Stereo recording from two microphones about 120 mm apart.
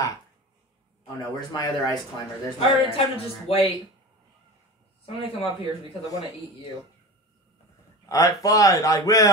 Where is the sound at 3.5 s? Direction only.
55° left (ahead or behind).